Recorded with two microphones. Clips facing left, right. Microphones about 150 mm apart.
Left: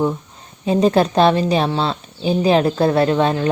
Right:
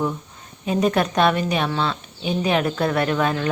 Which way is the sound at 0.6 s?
30° left (ahead or behind).